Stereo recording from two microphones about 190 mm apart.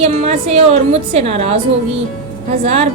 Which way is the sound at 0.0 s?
35° right (ahead or behind).